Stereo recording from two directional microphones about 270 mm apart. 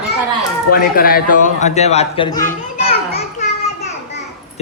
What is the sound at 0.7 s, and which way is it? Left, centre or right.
Speech, left.